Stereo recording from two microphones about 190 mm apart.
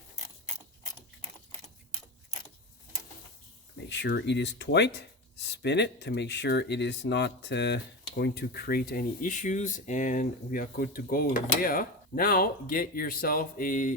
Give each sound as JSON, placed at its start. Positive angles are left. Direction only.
{"t": 3.8, "sound": "speech", "side_deg": 65}